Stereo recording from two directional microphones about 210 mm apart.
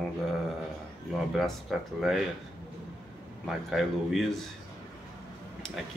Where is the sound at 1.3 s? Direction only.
Centre (ahead or behind).